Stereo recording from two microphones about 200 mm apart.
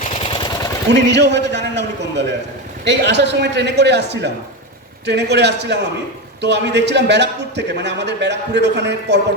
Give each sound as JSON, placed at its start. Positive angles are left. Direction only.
{"t": 0.0, "sound": "vehicle", "side_deg": 30}
{"t": 1.1, "sound": "a man's voice", "side_deg": -60}